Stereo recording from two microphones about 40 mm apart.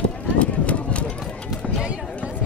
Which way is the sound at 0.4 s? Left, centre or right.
Left.